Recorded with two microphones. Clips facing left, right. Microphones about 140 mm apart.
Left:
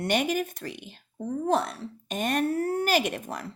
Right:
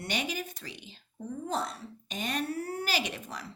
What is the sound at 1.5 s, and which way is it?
Speech, 65° left (ahead or behind).